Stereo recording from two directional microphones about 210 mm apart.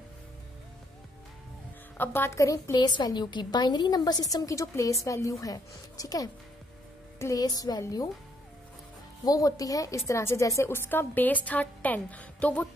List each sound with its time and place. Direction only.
2.0 s a woman's voice: 10° left (ahead or behind)
9.2 s a woman's voice: 15° left (ahead or behind)